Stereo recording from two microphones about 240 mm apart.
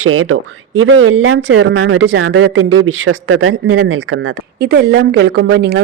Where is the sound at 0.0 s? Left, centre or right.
Right.